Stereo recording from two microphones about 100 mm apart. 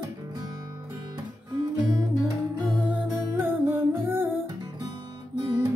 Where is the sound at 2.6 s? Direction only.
10° right (ahead or behind).